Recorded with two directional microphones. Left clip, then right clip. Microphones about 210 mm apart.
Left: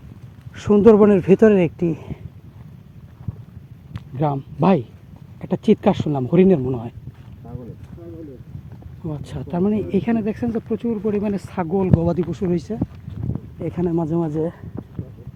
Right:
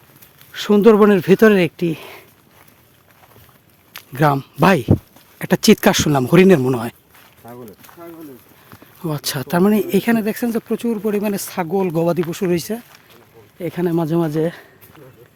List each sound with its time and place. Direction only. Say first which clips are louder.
0.6 s speech: right 1 dB; 30° right (ahead or behind)
4.1 s speech: right 7 dB; 40° right (ahead or behind)
9.0 s speech: right 8 dB; 45° right (ahead or behind)